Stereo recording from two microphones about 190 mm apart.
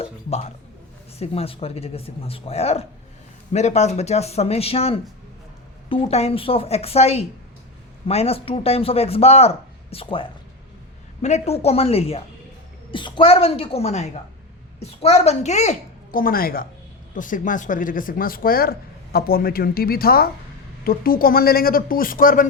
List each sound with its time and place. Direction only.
0.0 s a sound: 35° left (ahead or behind)
1.2 s a man's voice: 30° left (ahead or behind)
16.1 s a woman's voice: 50° left (ahead or behind)